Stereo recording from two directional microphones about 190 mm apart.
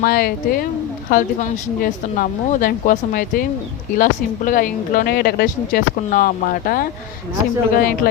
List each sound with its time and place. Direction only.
0.0 s speech: 50° left (ahead or behind)